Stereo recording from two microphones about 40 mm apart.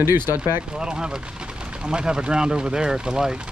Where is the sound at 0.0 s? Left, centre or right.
Right.